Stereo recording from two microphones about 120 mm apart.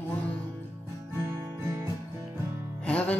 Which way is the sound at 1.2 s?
30° right (ahead or behind).